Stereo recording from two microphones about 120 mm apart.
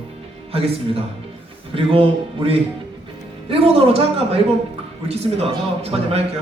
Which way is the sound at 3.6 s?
50° right (ahead or behind).